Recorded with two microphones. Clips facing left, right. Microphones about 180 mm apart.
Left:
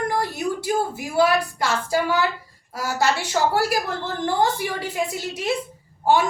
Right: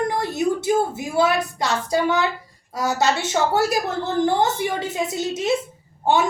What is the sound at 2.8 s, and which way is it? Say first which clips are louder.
A woman's voice: right 2 dB; 25° right (ahead or behind).